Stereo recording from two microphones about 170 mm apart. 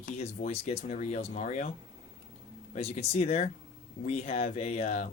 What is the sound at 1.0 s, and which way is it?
Speech, 50° left (ahead or behind).